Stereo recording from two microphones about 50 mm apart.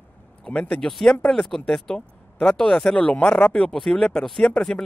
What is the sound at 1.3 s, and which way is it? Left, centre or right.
A man's voice, centre.